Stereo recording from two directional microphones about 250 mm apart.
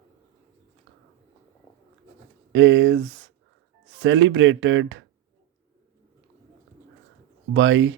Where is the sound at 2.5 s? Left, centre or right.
Right.